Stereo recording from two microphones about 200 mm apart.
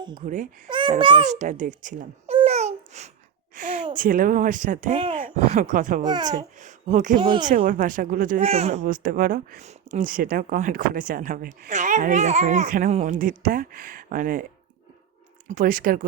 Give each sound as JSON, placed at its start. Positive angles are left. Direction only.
{"t": 0.2, "sound": "speech", "side_deg": -35}
{"t": 0.7, "sound": "a child's voice", "side_deg": -25}
{"t": 1.3, "sound": "speech", "side_deg": -40}
{"t": 3.5, "sound": "a sound", "side_deg": -40}
{"t": 3.9, "sound": "speech", "side_deg": -45}
{"t": 6.0, "sound": "a child's voice", "side_deg": -20}
{"t": 6.6, "sound": "speech", "side_deg": -40}
{"t": 7.2, "sound": "a child's voice", "side_deg": -25}
{"t": 7.4, "sound": "speech", "side_deg": -45}
{"t": 15.4, "sound": "speech", "side_deg": -45}